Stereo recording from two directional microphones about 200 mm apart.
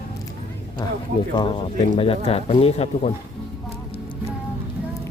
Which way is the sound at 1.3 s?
25° left (ahead or behind).